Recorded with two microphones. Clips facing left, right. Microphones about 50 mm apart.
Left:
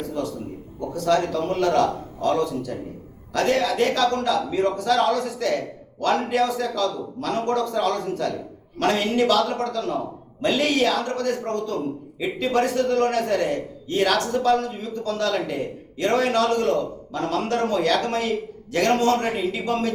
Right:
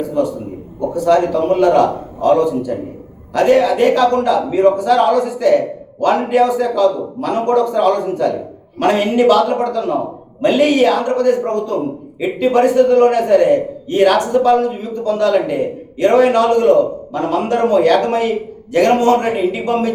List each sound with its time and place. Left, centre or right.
0.0 s a man's voice: centre